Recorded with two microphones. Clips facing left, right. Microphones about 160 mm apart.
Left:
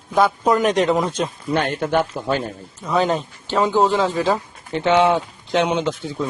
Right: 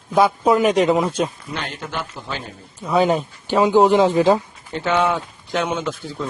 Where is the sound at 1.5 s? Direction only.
55° left (ahead or behind).